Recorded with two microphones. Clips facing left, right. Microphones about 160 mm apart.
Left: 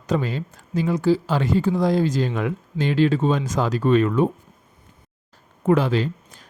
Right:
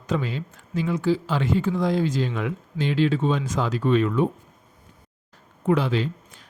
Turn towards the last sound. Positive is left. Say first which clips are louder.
# left 2 dB
turn(degrees=40)  # may be behind; listen again after turning